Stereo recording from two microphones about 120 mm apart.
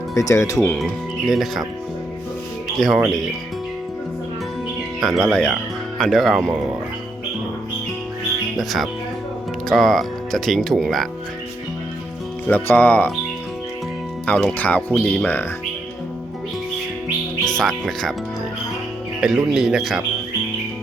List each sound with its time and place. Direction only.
0.1 s speech: 25° left (ahead or behind)
0.8 s speech: centre (ahead or behind)
2.7 s speech: centre (ahead or behind)
5.0 s speech: centre (ahead or behind)
8.5 s speech: centre (ahead or behind)
12.5 s speech: 15° left (ahead or behind)
14.3 s speech: 10° left (ahead or behind)
17.4 s speech: 5° left (ahead or behind)
19.2 s speech: 5° right (ahead or behind)